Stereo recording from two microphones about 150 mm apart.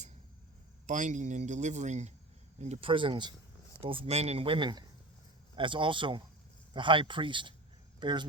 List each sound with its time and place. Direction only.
0.9 s a man's voice: 55° right (ahead or behind); by 8.2 s 30° right (ahead or behind)